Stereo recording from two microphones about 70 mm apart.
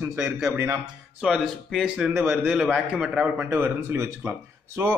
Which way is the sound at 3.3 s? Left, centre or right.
Right.